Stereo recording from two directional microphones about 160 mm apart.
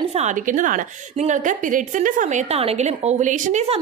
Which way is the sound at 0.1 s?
45° right (ahead or behind).